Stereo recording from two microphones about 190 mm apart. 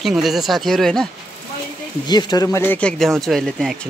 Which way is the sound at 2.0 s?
20° left (ahead or behind).